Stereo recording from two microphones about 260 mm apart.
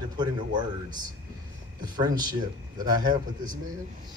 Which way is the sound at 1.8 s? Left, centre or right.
Centre.